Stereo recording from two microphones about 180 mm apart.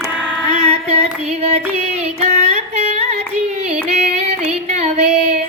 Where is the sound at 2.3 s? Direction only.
40° right (ahead or behind).